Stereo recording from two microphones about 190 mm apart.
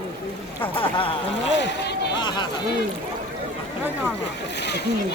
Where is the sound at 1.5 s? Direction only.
65° left (ahead or behind).